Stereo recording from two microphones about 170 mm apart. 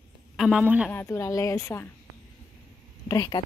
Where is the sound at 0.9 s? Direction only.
15° left (ahead or behind).